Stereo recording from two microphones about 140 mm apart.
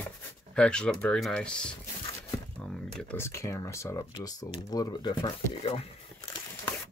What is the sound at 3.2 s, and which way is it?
Speech, 20° left (ahead or behind).